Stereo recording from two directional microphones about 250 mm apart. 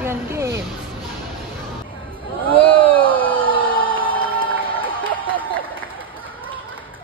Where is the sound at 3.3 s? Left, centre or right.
Centre.